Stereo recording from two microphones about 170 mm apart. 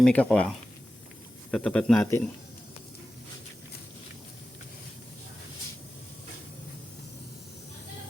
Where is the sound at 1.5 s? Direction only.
5° left (ahead or behind).